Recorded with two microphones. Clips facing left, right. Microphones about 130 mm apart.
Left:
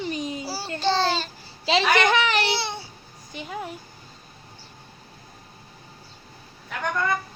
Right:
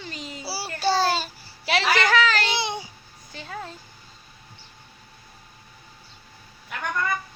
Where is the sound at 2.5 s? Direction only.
15° right (ahead or behind).